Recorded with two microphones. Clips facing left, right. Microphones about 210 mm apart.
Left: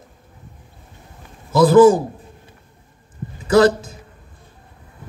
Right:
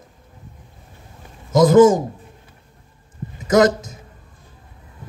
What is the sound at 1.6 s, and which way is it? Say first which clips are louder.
Speech: left 1 dB; 35° left (ahead or behind).